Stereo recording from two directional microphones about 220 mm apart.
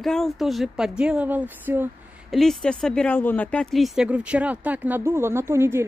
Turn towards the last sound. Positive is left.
turn(degrees=-10)  # may be behind; listen again after turning